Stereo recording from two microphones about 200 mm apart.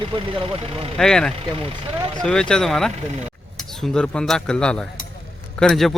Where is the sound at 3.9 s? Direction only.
5° left (ahead or behind).